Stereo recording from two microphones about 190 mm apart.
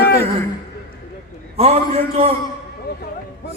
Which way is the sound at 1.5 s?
30° right (ahead or behind).